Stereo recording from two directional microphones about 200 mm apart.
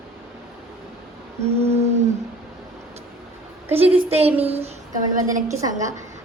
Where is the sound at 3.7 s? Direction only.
30° right (ahead or behind).